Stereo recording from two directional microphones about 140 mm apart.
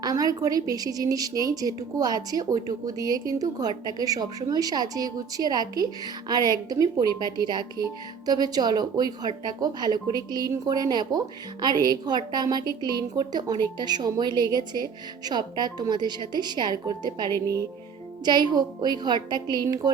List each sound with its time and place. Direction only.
0.0 s a woman's voice: 25° right (ahead or behind)